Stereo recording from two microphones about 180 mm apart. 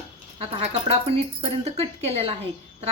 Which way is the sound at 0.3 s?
35° right (ahead or behind).